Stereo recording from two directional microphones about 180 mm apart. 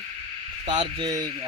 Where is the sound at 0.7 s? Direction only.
25° right (ahead or behind).